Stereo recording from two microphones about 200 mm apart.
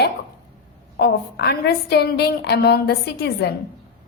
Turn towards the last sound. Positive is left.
turn(degrees=55)  # may be behind; listen again after turning